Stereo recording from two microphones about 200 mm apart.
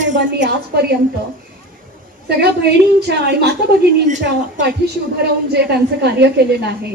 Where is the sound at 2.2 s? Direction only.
55° right (ahead or behind).